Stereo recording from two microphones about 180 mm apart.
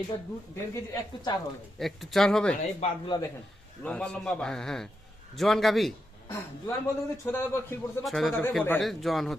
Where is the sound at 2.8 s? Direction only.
25° left (ahead or behind).